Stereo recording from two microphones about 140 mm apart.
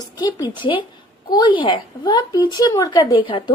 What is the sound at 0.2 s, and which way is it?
Speech, 30° left (ahead or behind).